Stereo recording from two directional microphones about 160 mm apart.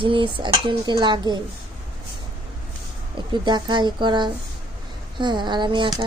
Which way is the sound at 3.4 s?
30° right (ahead or behind).